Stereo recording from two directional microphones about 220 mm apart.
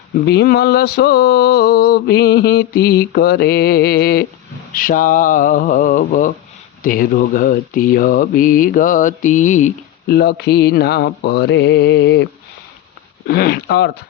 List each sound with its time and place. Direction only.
0.3 s mantra: 45° left (ahead or behind)
4.7 s speech: 40° left (ahead or behind)
13.2 s mantra: 45° left (ahead or behind)